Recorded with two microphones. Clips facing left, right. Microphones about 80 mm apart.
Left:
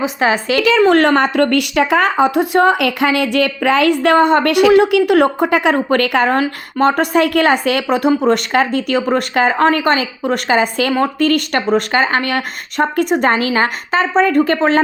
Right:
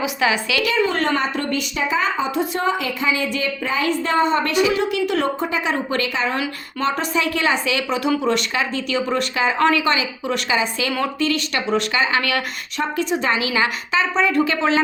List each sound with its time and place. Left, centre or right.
0.0 s a woman's voice: left
0.8 s a woman's voice: left
6.3 s speech: left